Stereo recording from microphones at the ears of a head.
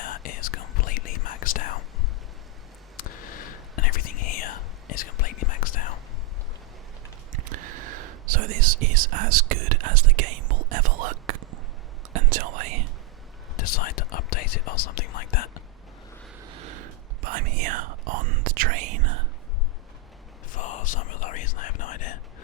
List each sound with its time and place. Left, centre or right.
0.0 s whispering: left
3.0 s whispering: left
7.3 s whispering: right
13.6 s whispering: left
16.4 s whispering: right
20.5 s whispering: left